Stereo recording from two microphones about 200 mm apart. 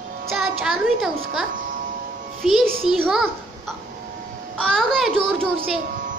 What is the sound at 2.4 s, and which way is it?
A child's voice, centre (ahead or behind).